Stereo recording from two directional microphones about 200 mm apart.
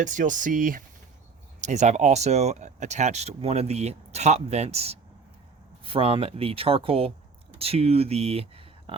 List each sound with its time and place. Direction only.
0.0 s speech: 40° right (ahead or behind)